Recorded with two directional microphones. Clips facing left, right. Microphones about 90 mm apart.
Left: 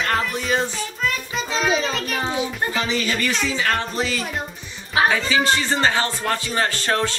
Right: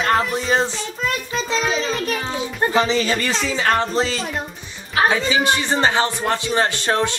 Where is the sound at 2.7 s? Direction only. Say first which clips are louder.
Right 5 dB; 30° right (ahead or behind).